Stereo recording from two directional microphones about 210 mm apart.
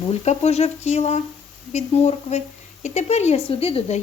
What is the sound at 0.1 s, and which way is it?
A woman's voice, 30° left (ahead or behind).